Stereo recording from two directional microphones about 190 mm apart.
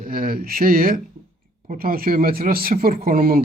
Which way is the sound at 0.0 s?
50° right (ahead or behind).